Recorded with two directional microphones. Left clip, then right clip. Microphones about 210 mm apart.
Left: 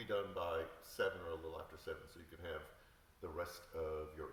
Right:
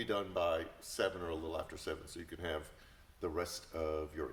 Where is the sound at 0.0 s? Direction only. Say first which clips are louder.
Right 6 dB; 40° right (ahead or behind).